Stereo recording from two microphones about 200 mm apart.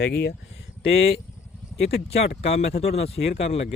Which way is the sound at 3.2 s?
50° left (ahead or behind).